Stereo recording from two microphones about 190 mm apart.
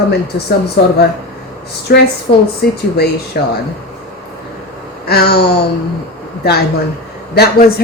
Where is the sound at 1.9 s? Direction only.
55° left (ahead or behind).